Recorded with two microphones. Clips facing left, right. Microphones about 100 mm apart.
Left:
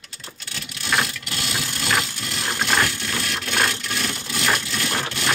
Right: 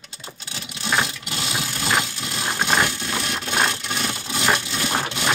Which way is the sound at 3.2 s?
20° right (ahead or behind).